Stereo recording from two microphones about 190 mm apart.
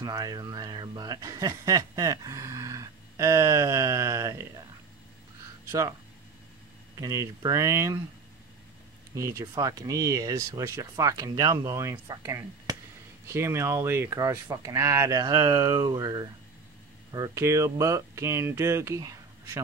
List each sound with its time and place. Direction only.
0.0 s a sound: 20° right (ahead or behind)
5.7 s speech: 15° right (ahead or behind)
7.0 s speech: 15° right (ahead or behind)
9.1 s speech: 15° right (ahead or behind)